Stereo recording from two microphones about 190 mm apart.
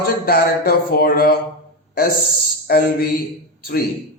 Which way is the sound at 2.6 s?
55° left (ahead or behind).